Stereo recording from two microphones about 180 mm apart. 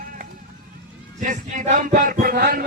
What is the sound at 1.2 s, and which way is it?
Speech, 45° right (ahead or behind).